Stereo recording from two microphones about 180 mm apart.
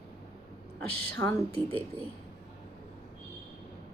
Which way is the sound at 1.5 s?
30° right (ahead or behind).